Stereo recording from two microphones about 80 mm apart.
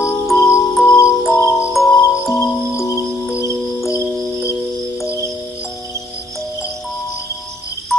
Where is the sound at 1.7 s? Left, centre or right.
Centre.